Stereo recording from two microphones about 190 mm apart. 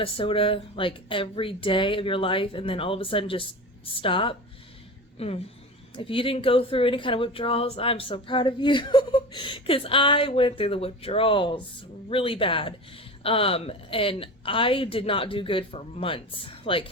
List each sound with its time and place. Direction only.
0.0 s a woman's voice: 30° left (ahead or behind)